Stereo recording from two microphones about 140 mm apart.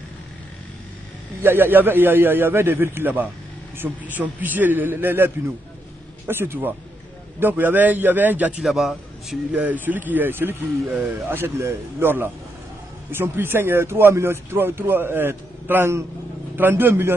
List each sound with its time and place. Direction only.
1.4 s a man's voice: 15° right (ahead or behind)